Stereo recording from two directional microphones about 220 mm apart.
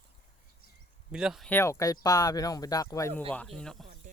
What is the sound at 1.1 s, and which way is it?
Speech, centre (ahead or behind).